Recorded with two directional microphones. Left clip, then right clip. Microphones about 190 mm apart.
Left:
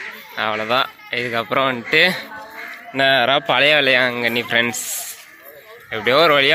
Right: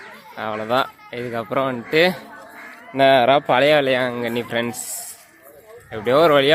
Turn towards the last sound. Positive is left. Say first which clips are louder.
# left 1 dB
turn(degrees=-10)  # may be behind; listen again after turning